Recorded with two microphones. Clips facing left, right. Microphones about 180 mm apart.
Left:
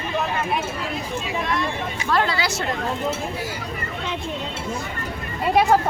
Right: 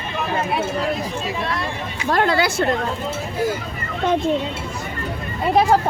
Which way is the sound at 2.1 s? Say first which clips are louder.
Right 4 dB; 50° right (ahead or behind).